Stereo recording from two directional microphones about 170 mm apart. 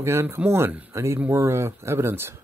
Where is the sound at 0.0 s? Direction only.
15° right (ahead or behind).